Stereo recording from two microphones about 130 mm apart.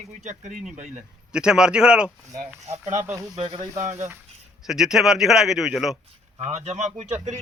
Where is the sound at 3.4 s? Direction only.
45° right (ahead or behind).